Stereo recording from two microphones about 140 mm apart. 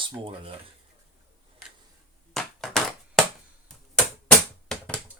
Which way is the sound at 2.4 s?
5° left (ahead or behind).